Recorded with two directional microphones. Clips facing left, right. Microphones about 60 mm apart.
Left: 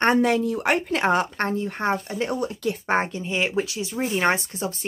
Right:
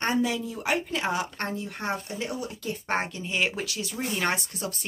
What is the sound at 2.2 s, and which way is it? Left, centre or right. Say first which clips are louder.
Speech: left 9 dB; left.